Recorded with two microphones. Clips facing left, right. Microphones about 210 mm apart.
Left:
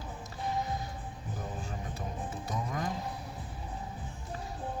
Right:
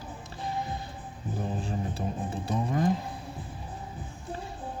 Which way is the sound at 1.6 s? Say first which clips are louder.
Right 7 dB; 30° right (ahead or behind).